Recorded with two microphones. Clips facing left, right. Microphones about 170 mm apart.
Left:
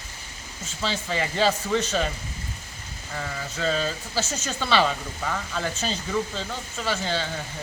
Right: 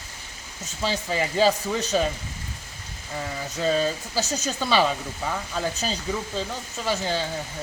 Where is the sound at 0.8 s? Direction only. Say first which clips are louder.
Right 2 dB; 10° right (ahead or behind).